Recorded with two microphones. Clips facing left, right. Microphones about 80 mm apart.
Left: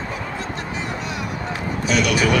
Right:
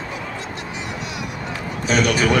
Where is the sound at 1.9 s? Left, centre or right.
Right.